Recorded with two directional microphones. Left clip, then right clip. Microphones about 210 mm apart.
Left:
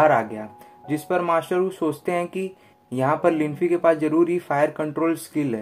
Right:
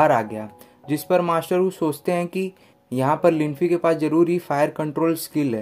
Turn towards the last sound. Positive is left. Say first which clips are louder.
# right 2 dB
turn(degrees=-40)  # may be behind; listen again after turning